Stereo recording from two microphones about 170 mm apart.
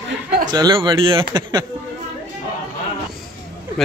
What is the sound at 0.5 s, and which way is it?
Speech, 25° right (ahead or behind).